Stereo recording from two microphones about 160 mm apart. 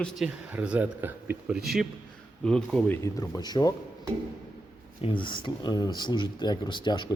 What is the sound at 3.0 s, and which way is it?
Speech, 20° left (ahead or behind).